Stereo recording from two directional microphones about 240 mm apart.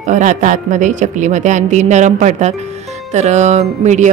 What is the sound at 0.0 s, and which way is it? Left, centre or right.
Speech, right.